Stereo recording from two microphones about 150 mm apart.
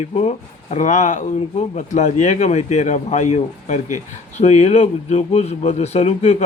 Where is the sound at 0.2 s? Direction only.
45° left (ahead or behind).